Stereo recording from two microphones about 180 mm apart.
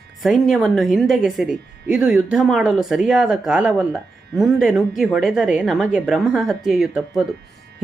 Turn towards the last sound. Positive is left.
turn(degrees=-5)  # may be behind; listen again after turning